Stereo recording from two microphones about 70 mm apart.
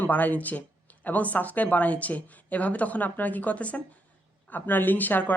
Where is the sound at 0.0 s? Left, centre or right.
Left.